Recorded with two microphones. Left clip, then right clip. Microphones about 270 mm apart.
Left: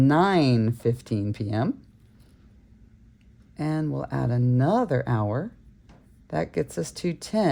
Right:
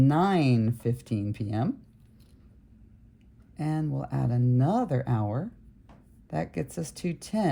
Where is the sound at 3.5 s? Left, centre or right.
Left.